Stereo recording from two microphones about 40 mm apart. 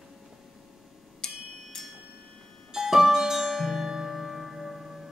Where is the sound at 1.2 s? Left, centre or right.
Centre.